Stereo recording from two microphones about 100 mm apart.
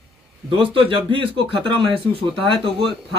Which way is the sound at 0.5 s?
65° right (ahead or behind).